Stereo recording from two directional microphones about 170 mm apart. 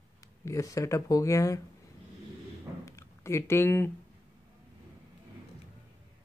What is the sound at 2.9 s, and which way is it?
Speech, 15° left (ahead or behind).